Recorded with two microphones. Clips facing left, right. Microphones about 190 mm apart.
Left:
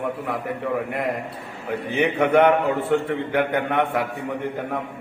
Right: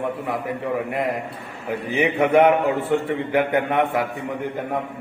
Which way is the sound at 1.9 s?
5° right (ahead or behind).